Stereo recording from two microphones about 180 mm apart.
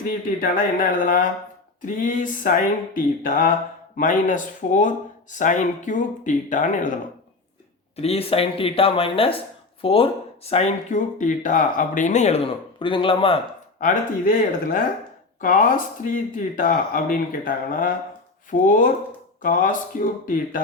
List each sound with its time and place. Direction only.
0.3 s speech: 50° left (ahead or behind)
7.9 s speech: 35° left (ahead or behind)
12.8 s speech: 30° left (ahead or behind)
13.7 s speech: 50° left (ahead or behind)